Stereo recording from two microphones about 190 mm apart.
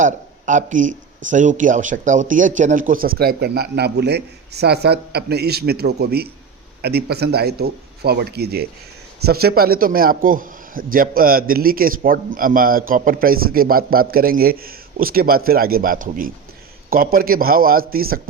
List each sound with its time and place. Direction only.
0.0 s a man's voice: 40° right (ahead or behind)